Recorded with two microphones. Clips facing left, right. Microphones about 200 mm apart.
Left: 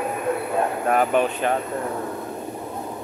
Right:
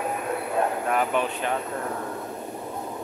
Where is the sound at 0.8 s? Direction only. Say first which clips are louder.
Left 5 dB; 45° left (ahead or behind).